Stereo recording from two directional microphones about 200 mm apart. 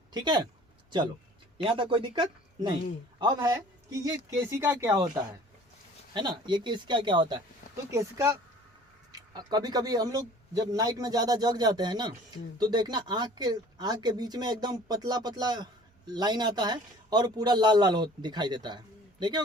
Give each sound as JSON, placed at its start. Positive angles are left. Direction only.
{"t": 0.1, "sound": "speech", "side_deg": -20}
{"t": 1.5, "sound": "a man's voice", "side_deg": -25}